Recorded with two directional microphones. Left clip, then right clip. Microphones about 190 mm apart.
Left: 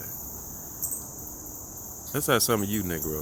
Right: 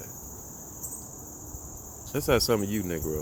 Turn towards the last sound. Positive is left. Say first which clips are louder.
# even
turn(degrees=10)  # may be behind; listen again after turning